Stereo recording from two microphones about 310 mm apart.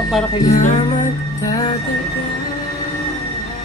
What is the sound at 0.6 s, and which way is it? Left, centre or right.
Music, left.